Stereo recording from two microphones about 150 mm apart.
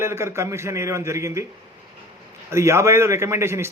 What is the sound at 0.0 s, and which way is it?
A man's voice, 15° right (ahead or behind).